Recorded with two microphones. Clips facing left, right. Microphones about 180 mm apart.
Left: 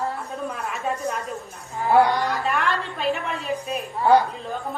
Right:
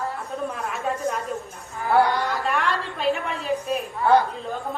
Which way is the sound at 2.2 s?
Centre (ahead or behind).